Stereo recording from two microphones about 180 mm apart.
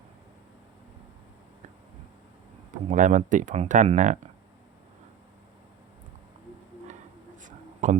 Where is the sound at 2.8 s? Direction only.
45° right (ahead or behind).